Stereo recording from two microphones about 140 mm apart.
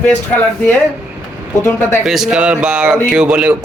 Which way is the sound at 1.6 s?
15° left (ahead or behind).